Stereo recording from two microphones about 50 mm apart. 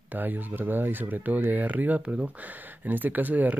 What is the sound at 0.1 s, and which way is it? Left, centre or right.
Speech, right.